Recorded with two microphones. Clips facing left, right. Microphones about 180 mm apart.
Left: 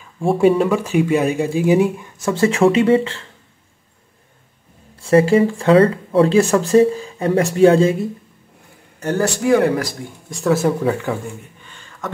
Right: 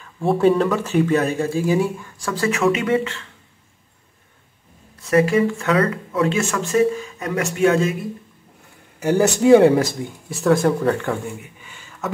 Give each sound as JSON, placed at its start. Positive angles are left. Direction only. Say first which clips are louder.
{"t": 0.3, "sound": "speech", "louder": "left 2 dB", "side_deg": 5}
{"t": 4.9, "sound": "speech", "louder": "left 4 dB", "side_deg": 30}
{"t": 9.0, "sound": "speech", "louder": "right 3 dB", "side_deg": -15}
{"t": 10.3, "sound": "speech", "louder": "even", "side_deg": 0}